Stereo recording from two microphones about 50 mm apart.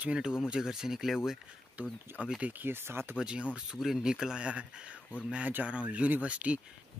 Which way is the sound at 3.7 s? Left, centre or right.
Centre.